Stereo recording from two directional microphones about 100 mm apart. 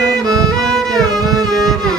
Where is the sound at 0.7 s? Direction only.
5° left (ahead or behind).